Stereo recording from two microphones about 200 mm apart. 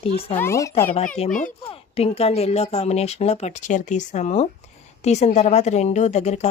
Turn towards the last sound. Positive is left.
turn(degrees=35)  # may be behind; listen again after turning